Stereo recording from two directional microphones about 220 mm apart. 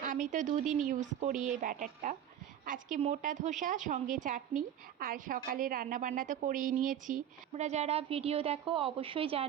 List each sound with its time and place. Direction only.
0.0 s a woman's voice: 35° right (ahead or behind)